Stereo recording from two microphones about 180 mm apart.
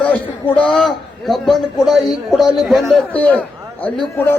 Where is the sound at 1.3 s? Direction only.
Centre (ahead or behind).